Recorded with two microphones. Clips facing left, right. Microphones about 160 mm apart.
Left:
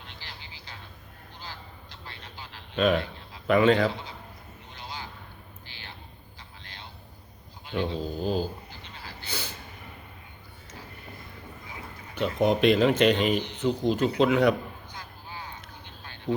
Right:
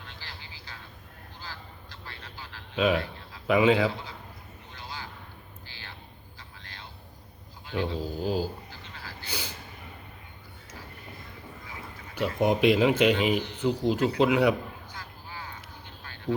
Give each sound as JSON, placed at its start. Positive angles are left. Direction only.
{"t": 0.0, "sound": "vehicle", "side_deg": 20}
{"t": 2.7, "sound": "speech", "side_deg": -10}
{"t": 4.7, "sound": "a sound", "side_deg": 20}
{"t": 6.6, "sound": "vehicle", "side_deg": 20}
{"t": 7.7, "sound": "dog", "side_deg": 20}
{"t": 8.0, "sound": "speech", "side_deg": -10}
{"t": 8.7, "sound": "a sound", "side_deg": 20}
{"t": 9.2, "sound": "gasp", "side_deg": -10}
{"t": 12.1, "sound": "speech", "side_deg": -10}
{"t": 14.9, "sound": "vehicle", "side_deg": 20}